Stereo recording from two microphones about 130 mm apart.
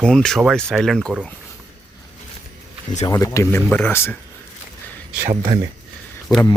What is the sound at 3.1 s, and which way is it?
Speech, 25° left (ahead or behind).